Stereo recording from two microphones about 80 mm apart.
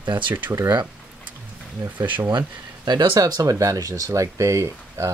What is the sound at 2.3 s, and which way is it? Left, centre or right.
Speech, right.